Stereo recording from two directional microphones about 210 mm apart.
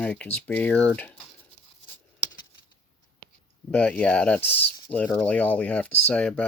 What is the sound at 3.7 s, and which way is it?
Speech, 5° left (ahead or behind).